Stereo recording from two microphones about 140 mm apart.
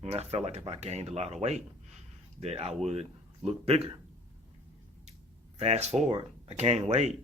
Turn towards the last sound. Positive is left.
turn(degrees=-50)  # may be behind; listen again after turning